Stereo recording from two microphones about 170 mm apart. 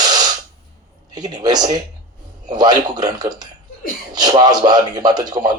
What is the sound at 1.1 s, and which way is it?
A man's voice, 25° right (ahead or behind).